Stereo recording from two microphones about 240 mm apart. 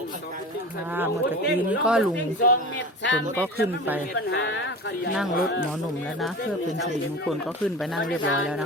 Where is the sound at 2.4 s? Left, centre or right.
Left.